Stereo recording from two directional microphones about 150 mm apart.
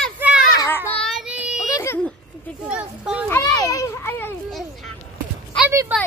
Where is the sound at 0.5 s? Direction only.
20° left (ahead or behind).